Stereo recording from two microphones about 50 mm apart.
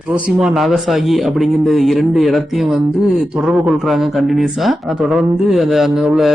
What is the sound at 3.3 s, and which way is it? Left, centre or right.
Speech, right.